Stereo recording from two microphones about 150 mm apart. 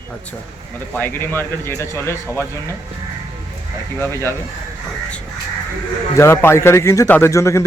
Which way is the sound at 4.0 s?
20° left (ahead or behind).